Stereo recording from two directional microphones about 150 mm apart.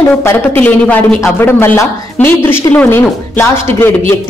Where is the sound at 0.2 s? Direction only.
15° left (ahead or behind).